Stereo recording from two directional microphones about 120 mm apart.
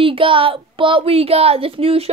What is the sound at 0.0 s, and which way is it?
Speech, 50° right (ahead or behind).